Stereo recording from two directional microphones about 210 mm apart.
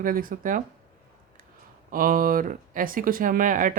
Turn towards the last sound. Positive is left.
turn(degrees=-40)  # may be behind; listen again after turning